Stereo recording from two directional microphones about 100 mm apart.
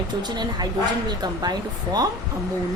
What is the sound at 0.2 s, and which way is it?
A woman's voice, 45° right (ahead or behind).